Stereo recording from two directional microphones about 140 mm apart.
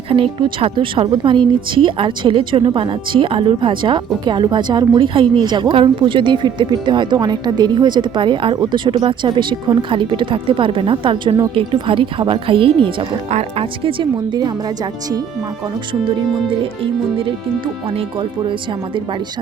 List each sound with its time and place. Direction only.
0.1 s speech: 35° right (ahead or behind)
16.0 s speech: 40° right (ahead or behind)